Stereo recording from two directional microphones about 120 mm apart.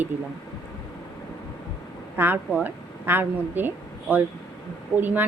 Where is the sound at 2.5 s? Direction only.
5° right (ahead or behind).